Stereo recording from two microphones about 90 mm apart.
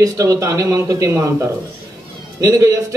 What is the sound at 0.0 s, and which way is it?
A man's voice, 40° right (ahead or behind).